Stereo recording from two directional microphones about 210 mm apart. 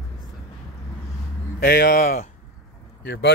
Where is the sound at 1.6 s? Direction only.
50° left (ahead or behind).